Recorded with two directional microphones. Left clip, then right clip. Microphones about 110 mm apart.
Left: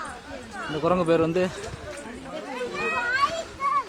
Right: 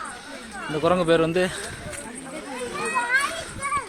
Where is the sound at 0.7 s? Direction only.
Centre (ahead or behind).